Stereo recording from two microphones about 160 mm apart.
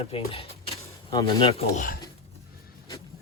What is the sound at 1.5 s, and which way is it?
Speech, 40° left (ahead or behind).